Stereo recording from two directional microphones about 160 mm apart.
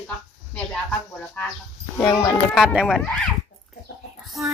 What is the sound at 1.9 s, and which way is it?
Speech, 10° left (ahead or behind).